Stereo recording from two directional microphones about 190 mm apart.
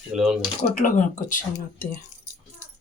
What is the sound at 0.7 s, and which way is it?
Speech, 45° left (ahead or behind).